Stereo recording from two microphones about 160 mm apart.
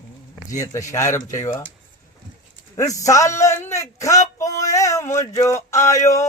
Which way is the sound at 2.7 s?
20° left (ahead or behind).